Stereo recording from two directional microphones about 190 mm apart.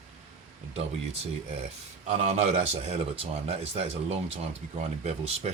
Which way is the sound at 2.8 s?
35° right (ahead or behind).